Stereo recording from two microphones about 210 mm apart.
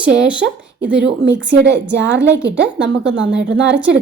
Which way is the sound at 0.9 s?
60° right (ahead or behind).